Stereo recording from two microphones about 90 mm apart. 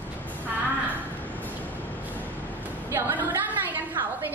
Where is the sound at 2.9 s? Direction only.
25° right (ahead or behind).